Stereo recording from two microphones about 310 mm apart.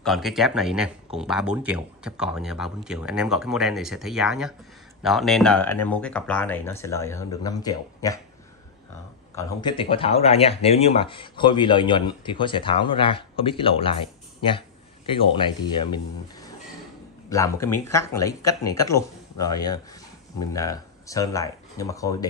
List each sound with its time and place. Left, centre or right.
0.0 s speech: centre
9.3 s speech: centre
15.1 s speech: centre
17.3 s speech: centre